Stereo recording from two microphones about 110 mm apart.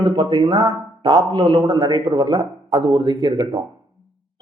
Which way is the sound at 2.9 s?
45° right (ahead or behind).